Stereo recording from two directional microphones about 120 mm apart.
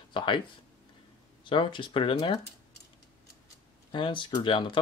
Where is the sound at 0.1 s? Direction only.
45° left (ahead or behind).